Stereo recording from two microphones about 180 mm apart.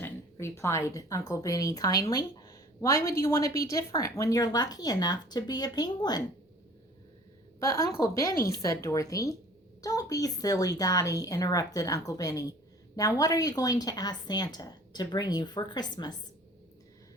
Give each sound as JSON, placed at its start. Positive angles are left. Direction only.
{"t": 0.0, "sound": "speech", "side_deg": 15}
{"t": 7.6, "sound": "speech", "side_deg": 15}